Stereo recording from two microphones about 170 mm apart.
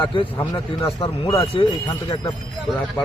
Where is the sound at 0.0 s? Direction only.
30° left (ahead or behind).